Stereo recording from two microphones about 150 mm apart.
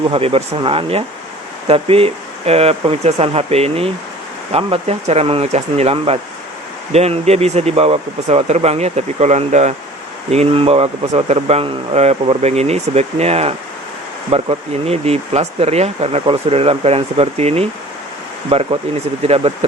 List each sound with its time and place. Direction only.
0.1 s speech: 40° right (ahead or behind)